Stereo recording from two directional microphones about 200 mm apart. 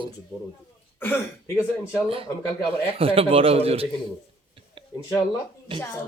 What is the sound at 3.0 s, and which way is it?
Speech, 30° right (ahead or behind).